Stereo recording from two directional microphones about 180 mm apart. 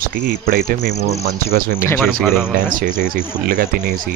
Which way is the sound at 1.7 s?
10° left (ahead or behind).